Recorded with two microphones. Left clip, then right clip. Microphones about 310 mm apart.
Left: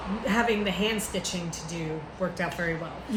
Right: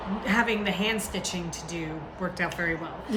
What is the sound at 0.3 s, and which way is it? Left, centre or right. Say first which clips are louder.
A woman's voice: even; centre.